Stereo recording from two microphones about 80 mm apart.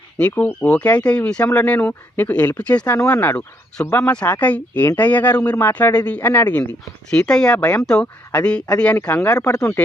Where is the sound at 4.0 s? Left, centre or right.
Centre.